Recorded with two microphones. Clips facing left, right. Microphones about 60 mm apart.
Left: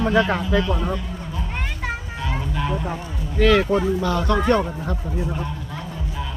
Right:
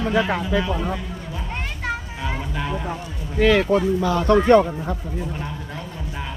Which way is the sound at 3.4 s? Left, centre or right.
Centre.